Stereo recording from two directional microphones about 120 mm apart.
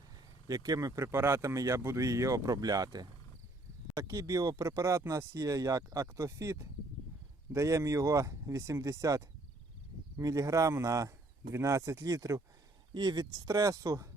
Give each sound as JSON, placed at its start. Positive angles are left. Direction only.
{"t": 0.4, "sound": "speech", "side_deg": -30}